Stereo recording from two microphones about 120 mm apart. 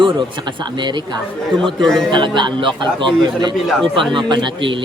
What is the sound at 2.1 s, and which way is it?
A man's voice, 40° right (ahead or behind).